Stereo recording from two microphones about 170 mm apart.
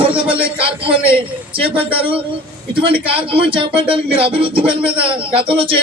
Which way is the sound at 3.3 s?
30° right (ahead or behind).